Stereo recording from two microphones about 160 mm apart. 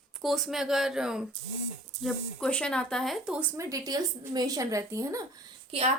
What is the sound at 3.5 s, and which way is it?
A woman's voice, 20° right (ahead or behind).